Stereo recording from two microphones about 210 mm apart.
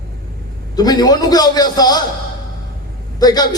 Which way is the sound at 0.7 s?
20° left (ahead or behind).